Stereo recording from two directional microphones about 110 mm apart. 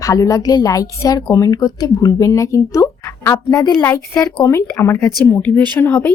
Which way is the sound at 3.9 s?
25° left (ahead or behind).